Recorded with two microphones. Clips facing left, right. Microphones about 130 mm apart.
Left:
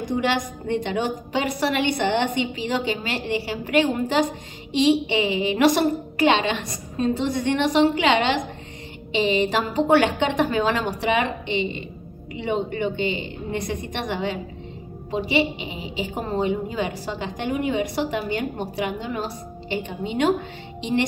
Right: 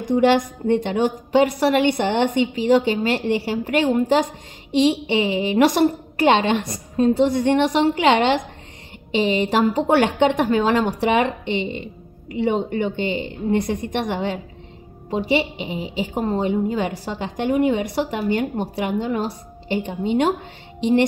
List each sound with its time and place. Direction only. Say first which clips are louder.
0.2 s a woman's voice: right 7 dB; 50° right (ahead or behind)